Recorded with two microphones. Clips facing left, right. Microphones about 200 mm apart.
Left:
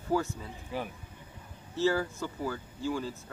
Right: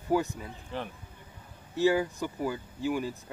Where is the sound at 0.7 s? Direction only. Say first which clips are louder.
Left 1 dB; 10° left (ahead or behind).